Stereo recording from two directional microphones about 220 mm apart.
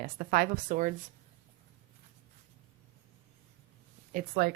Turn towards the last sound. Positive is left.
turn(degrees=-40)  # may be behind; listen again after turning